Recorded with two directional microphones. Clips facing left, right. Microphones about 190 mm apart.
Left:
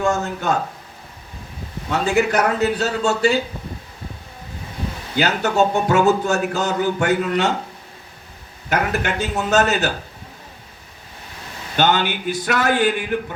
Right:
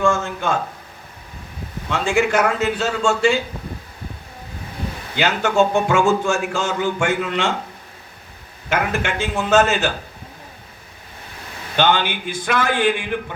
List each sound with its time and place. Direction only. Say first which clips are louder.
0.0 s a man's voice: right 1 dB; 40° left (ahead or behind)
1.9 s a man's voice: even; 40° left (ahead or behind)
5.1 s a man's voice: right 1 dB; 40° left (ahead or behind)
8.7 s a man's voice: even; 40° left (ahead or behind)
11.8 s a man's voice: even; 40° left (ahead or behind)